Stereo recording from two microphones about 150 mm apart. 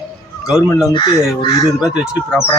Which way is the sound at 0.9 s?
30° left (ahead or behind).